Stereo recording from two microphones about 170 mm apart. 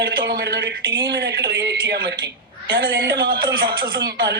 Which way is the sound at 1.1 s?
85° right.